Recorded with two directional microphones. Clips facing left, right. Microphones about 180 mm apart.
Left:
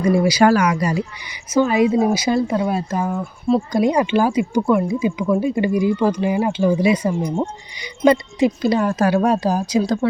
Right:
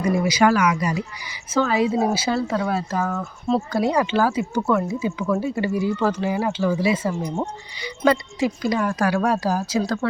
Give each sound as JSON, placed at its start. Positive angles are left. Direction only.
{"t": 0.0, "sound": "a woman's voice", "side_deg": 30}